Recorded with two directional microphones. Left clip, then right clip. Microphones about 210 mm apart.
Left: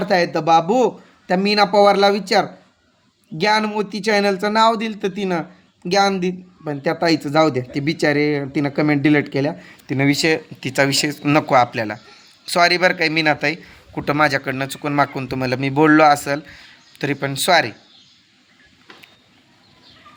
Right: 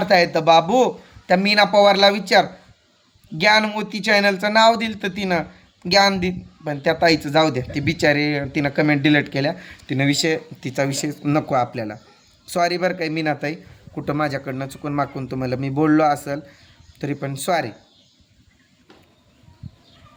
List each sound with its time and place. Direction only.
0.0 s speech: 5° right (ahead or behind)